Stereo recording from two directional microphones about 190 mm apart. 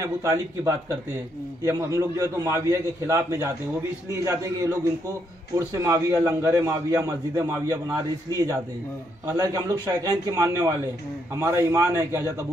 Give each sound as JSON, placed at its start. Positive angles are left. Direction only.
{"t": 0.0, "sound": "a man's voice", "side_deg": -15}
{"t": 1.7, "sound": "a man's voice", "side_deg": -15}
{"t": 5.8, "sound": "a man's voice", "side_deg": -15}
{"t": 9.2, "sound": "a man's voice", "side_deg": -15}